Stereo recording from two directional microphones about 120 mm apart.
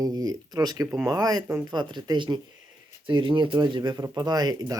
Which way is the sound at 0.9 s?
10° right (ahead or behind).